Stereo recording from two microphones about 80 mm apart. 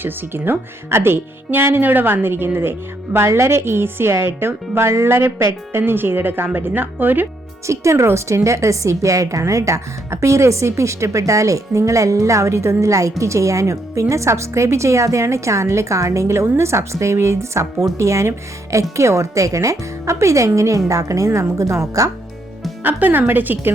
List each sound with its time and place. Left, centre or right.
0.0 s speech: right
7.7 s a woman's voice: right
22.8 s speech: right